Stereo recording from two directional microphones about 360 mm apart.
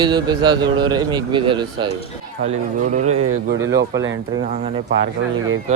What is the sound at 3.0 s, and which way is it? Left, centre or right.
Speech, right.